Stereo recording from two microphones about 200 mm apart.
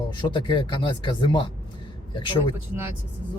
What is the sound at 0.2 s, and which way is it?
Speech, 25° left (ahead or behind).